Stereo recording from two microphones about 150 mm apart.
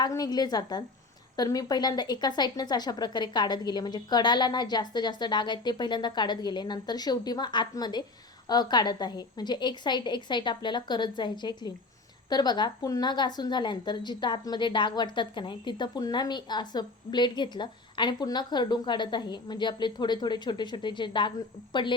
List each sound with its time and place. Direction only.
0.0 s a woman's voice: 25° left (ahead or behind)